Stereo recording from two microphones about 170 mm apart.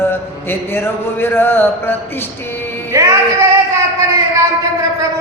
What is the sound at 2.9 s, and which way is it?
Music, 20° right (ahead or behind).